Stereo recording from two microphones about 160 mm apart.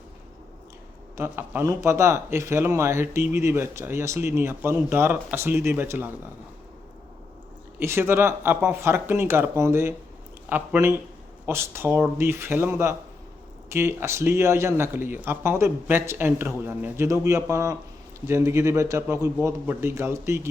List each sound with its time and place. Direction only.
1.1 s speech: 15° right (ahead or behind)
7.8 s speech: 15° right (ahead or behind)